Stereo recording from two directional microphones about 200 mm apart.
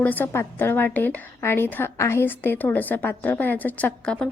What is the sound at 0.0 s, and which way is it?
A woman's voice, 10° left (ahead or behind).